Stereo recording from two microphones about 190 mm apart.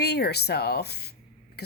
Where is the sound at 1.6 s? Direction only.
60° left (ahead or behind).